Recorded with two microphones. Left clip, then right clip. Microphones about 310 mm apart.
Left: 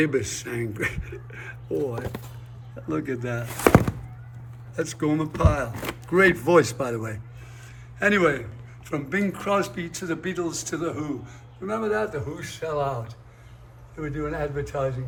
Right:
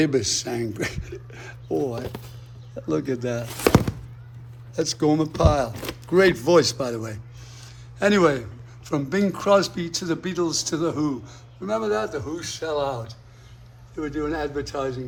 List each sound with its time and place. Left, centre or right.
0.0 s speech: centre
7.6 s a sound: centre
8.9 s a man's voice: centre